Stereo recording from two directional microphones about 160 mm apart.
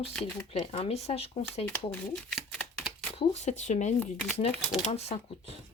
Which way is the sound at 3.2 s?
45° left (ahead or behind).